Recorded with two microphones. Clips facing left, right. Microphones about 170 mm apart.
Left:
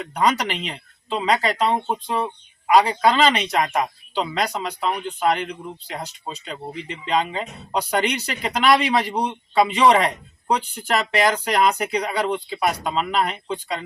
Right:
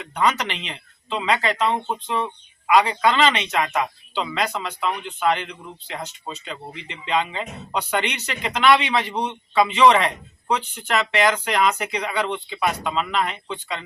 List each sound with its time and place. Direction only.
0.0 s speech: 35° left (ahead or behind)
2.7 s speech: 35° left (ahead or behind)